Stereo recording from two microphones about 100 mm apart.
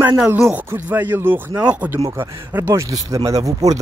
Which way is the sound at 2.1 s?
25° right (ahead or behind).